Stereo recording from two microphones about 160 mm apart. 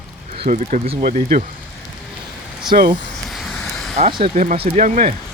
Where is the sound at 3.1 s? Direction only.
Centre (ahead or behind).